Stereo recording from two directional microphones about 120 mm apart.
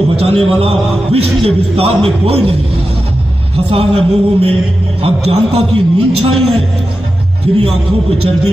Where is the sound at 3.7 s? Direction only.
50° right (ahead or behind).